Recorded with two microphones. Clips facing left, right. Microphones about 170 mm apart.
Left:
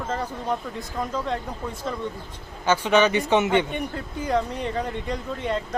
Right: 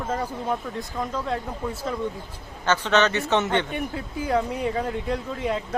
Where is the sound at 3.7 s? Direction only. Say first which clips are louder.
Even; 5° right (ahead or behind).